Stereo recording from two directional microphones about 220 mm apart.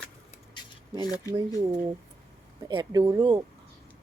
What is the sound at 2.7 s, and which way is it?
Speech, 20° right (ahead or behind).